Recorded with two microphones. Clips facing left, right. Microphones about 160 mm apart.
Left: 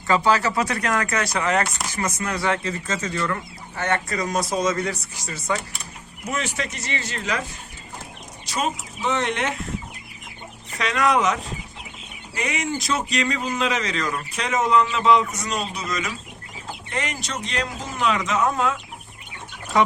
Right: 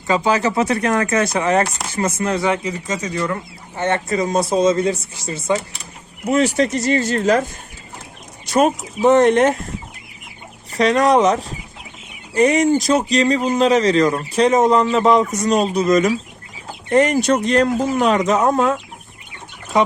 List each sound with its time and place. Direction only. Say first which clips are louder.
0.1 s speech: right 3 dB; 20° right (ahead or behind)
6.3 s speech: right 13 dB; 35° right (ahead or behind)
8.4 s a man's voice: right 10 dB; 50° right (ahead or behind)
10.7 s a man's voice: right 7 dB; 35° right (ahead or behind)
19.7 s speech: right 3 dB; 20° right (ahead or behind)